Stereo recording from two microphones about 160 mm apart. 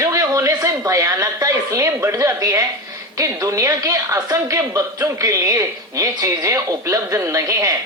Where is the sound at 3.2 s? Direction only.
20° right (ahead or behind).